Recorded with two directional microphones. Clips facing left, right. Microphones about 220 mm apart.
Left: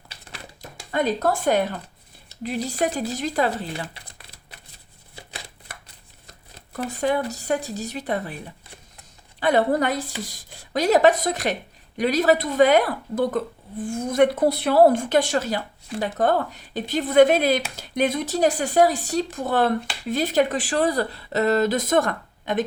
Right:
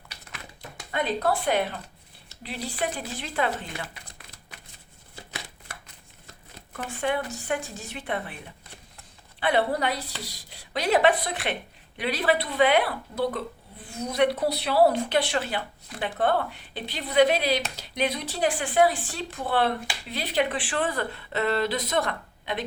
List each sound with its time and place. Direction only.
0.1 s a sound: 30° left (ahead or behind)
2.4 s speech: 45° left (ahead or behind)
6.7 s speech: 40° left (ahead or behind)
9.4 s speech: 45° left (ahead or behind)